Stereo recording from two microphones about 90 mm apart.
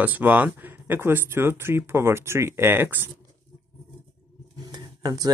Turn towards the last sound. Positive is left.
turn(degrees=-45)  # may be behind; listen again after turning